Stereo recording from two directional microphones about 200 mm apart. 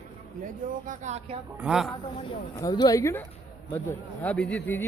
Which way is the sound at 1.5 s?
5° right (ahead or behind).